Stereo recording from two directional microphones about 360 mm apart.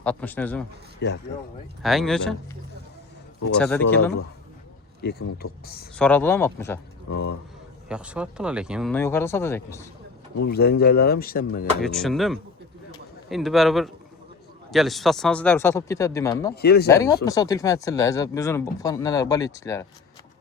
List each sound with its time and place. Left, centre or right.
0.0 s speech: centre
0.9 s speech: left
1.8 s speech: centre
3.5 s speech: centre
5.0 s speech: left
6.0 s speech: centre
7.9 s speech: centre
10.4 s speech: left
11.8 s speech: centre
16.6 s speech: left
16.9 s speech: centre